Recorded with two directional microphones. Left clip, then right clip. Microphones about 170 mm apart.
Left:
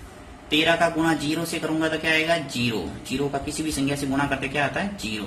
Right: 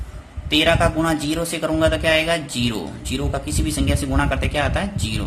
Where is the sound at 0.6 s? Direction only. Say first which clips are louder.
Right 3 dB; 35° right (ahead or behind).